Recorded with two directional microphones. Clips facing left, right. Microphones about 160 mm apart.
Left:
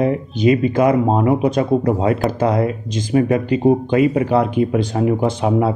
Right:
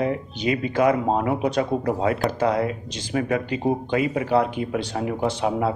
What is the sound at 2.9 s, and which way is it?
Speech, 45° left (ahead or behind).